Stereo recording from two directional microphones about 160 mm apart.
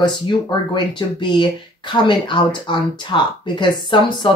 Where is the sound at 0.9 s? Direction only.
30° left (ahead or behind).